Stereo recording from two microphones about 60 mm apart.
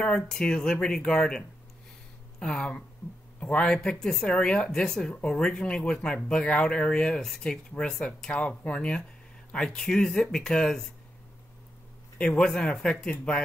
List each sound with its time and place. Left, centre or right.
0.0 s speech: centre
12.2 s speech: centre